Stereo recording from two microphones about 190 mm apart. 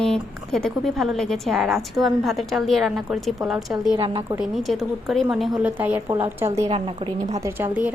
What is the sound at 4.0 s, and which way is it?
Speech, 25° right (ahead or behind).